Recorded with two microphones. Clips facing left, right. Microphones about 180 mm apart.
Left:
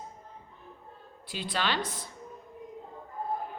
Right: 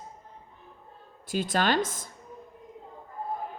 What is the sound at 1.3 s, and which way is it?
Speech, 45° right (ahead or behind).